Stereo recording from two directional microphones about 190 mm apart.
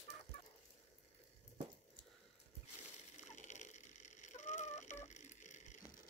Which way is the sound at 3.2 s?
40° left (ahead or behind).